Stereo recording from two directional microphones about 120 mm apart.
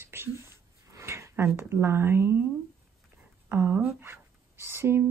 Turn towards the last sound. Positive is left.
turn(degrees=-20)  # may be behind; listen again after turning